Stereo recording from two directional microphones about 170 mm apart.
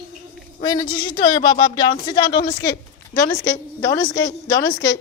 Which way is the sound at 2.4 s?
65° left (ahead or behind).